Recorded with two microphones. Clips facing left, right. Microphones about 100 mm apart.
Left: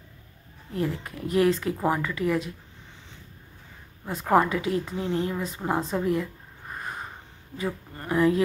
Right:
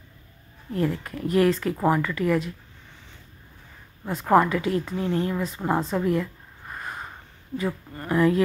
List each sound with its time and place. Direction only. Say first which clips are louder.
0.7 s speech: right 3 dB; 20° left (ahead or behind)
4.4 s speech: even; 20° left (ahead or behind)
5.6 s a woman's voice: right 2 dB; 10° left (ahead or behind)
5.9 s speech: right 1 dB; 20° left (ahead or behind)
7.5 s speech: right 3 dB; 25° left (ahead or behind)